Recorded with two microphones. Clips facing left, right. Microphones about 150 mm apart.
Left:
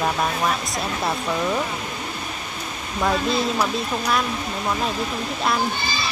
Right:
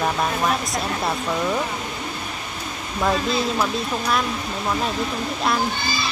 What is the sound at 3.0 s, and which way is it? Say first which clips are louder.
Speech: even; centre (ahead or behind).